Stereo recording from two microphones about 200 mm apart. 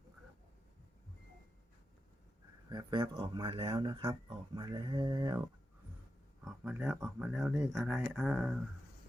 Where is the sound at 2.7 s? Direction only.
20° right (ahead or behind).